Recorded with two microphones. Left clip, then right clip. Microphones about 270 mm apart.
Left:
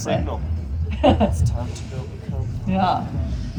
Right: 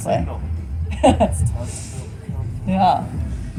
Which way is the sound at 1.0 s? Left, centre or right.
Right.